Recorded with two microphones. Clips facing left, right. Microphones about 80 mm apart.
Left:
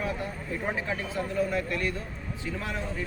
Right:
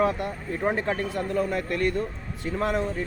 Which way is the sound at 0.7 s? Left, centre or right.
Right.